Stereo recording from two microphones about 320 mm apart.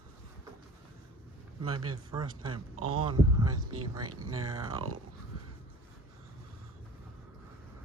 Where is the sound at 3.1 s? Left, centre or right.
Centre.